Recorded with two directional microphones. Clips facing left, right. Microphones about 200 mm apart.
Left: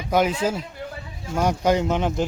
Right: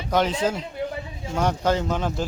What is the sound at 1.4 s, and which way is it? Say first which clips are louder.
Speech: left 2 dB; 10° left (ahead or behind).